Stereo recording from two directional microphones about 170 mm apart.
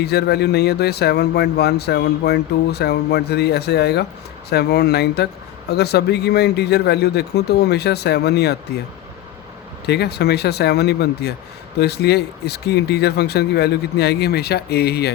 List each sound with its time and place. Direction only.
0.0 s speech: 75° left (ahead or behind)
9.8 s speech: 70° left (ahead or behind)